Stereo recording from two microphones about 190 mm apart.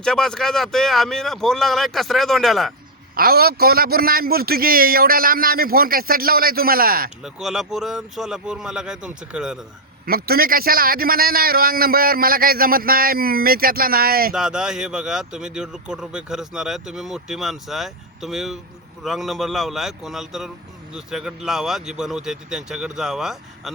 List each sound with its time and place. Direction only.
0.0 s a man's voice: 5° left (ahead or behind)
3.2 s a man's voice: 55° right (ahead or behind)
7.3 s a man's voice: centre (ahead or behind)
10.1 s a man's voice: 50° right (ahead or behind)
14.3 s a man's voice: 5° right (ahead or behind)